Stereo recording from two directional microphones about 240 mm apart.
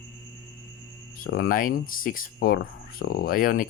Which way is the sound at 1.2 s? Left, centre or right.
Left.